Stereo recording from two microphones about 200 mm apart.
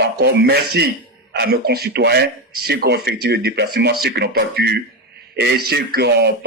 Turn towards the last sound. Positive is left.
turn(degrees=-55)  # may be behind; listen again after turning